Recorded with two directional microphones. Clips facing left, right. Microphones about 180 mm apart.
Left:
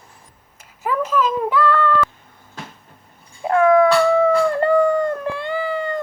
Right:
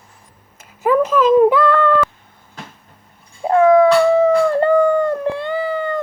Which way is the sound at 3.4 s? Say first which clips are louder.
Right 3 dB; 25° right (ahead or behind).